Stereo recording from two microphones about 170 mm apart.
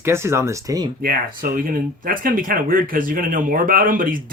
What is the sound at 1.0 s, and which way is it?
Speech, 60° right (ahead or behind).